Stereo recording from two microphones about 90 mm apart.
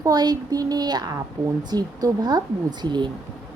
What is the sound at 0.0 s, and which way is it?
A woman's voice, 45° right (ahead or behind).